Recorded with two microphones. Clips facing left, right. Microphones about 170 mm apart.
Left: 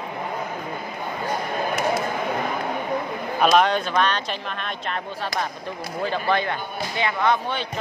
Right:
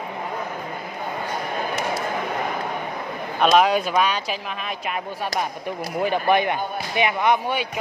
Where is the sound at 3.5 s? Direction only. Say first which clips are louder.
Right 3 dB; 5° right (ahead or behind).